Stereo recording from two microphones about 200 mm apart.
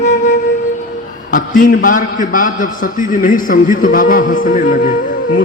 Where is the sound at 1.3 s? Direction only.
40° left (ahead or behind).